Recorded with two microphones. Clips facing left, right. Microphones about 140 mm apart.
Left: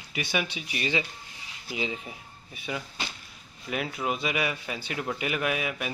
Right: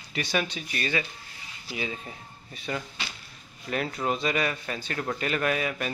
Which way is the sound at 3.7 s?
5° left (ahead or behind).